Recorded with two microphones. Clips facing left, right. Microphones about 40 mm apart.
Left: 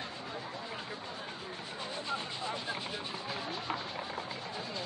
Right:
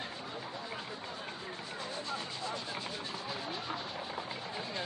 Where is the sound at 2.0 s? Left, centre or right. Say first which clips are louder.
Left 4 dB; left.